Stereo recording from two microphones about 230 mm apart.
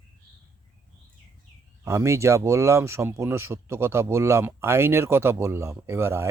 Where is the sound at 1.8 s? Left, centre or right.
Centre.